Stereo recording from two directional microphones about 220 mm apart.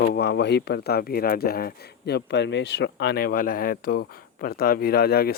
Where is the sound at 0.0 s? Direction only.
45° left (ahead or behind).